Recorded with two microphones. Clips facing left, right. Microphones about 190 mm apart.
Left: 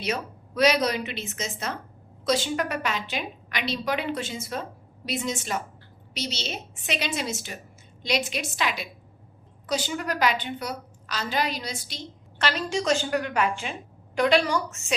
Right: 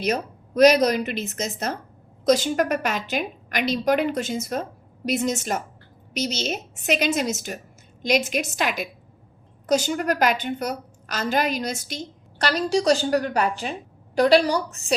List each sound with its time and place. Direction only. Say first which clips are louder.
0.0 s a woman's voice: right 5 dB; 40° right (ahead or behind)